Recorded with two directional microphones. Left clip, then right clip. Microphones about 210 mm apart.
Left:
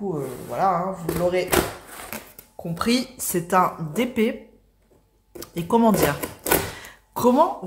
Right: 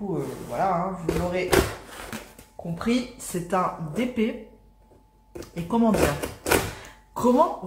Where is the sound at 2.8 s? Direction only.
50° left (ahead or behind).